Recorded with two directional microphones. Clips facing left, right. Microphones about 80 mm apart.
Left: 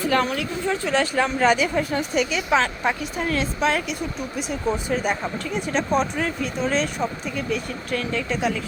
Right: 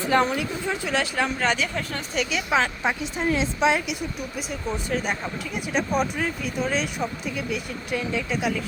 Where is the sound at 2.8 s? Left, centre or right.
Centre.